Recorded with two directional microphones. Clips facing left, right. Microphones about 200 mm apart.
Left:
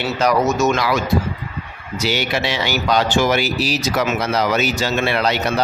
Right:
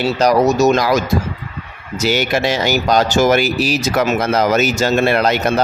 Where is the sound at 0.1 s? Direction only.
35° right (ahead or behind).